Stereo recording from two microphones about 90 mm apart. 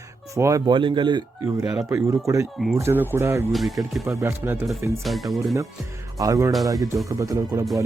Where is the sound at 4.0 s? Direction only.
30° right (ahead or behind).